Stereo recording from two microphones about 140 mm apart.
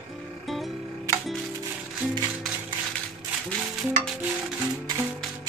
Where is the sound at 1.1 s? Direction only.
20° right (ahead or behind).